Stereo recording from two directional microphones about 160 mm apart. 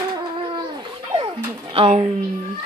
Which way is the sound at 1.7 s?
40° right (ahead or behind).